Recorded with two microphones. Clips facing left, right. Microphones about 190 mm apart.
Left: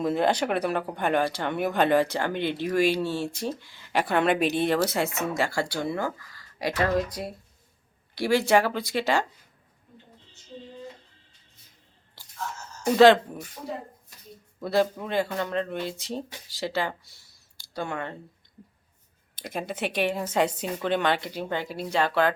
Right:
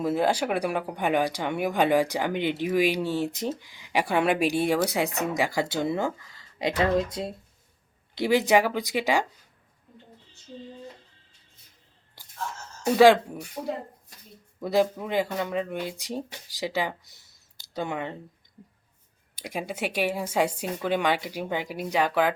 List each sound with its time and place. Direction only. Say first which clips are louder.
0.0 s a woman's voice: even; 5° right (ahead or behind)
13.0 s a woman's voice: left 1 dB; 10° right (ahead or behind)
14.6 s a woman's voice: right 1 dB; 15° right (ahead or behind)
19.4 s a woman's voice: even; 10° right (ahead or behind)